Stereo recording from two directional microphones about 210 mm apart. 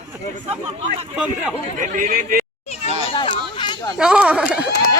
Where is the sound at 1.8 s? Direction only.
35° right (ahead or behind).